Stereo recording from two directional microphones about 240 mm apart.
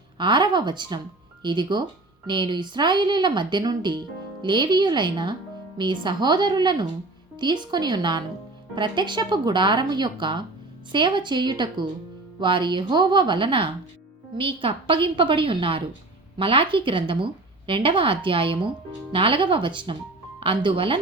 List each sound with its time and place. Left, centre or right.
0.2 s a woman's voice: centre